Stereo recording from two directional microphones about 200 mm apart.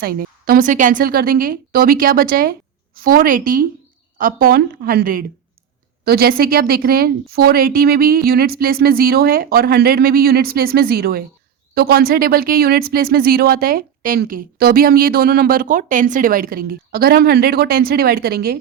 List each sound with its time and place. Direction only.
0.0 s speech: 45° right (ahead or behind)